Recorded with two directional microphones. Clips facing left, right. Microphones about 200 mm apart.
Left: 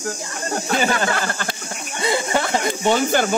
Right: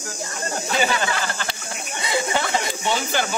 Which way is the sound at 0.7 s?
50° left (ahead or behind).